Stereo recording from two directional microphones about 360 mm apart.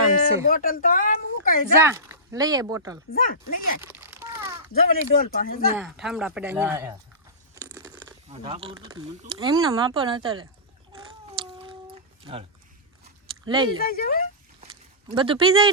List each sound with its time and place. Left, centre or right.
0.4 s a woman's voice: left
1.8 s speech: centre
3.1 s speech: left
3.8 s a sound: centre
4.7 s speech: left
5.7 s speech: centre
7.5 s a sound: centre
9.3 s speech: centre
12.2 s speech: centre
13.2 s biting: centre
13.8 s speech: left
15.1 s speech: centre